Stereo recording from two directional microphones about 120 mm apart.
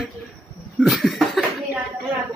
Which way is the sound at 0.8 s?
Centre (ahead or behind).